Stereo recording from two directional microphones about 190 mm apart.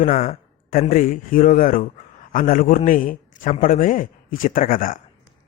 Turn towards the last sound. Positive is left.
turn(degrees=45)  # may be behind; listen again after turning